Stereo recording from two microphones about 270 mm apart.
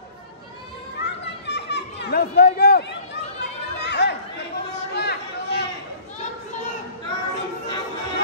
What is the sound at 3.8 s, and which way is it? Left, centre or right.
Chatter, left.